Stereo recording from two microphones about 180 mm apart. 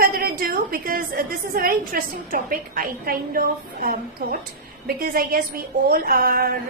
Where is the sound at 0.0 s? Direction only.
55° right (ahead or behind).